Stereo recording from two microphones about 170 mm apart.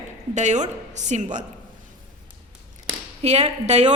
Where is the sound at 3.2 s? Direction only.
40° right (ahead or behind).